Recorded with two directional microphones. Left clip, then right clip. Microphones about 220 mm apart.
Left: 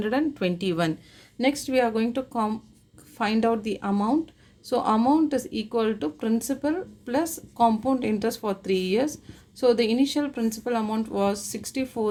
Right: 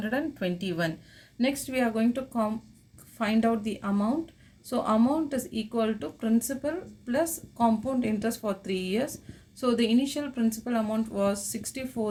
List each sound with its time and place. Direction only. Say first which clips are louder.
0.0 s speech: left 5 dB; 50° left (ahead or behind)